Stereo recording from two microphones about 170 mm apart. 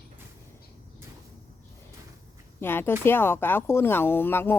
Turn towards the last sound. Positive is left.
turn(degrees=10)  # may be behind; listen again after turning